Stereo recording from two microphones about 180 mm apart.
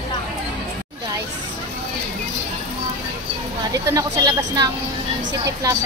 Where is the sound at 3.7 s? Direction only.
20° right (ahead or behind).